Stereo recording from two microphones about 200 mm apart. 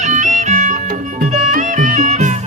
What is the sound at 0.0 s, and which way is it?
Music, 35° right (ahead or behind).